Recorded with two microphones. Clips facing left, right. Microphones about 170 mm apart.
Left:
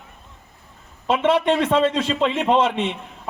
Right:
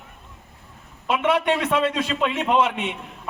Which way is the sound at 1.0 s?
30° left (ahead or behind).